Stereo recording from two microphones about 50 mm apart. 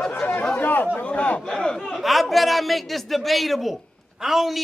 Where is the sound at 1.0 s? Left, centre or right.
Left.